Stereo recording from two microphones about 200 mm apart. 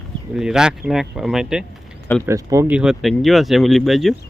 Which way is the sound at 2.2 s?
15° right (ahead or behind).